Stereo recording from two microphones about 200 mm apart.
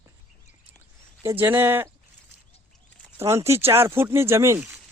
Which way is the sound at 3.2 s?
15° right (ahead or behind).